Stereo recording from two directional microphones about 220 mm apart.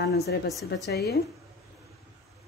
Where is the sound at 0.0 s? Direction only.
45° left (ahead or behind).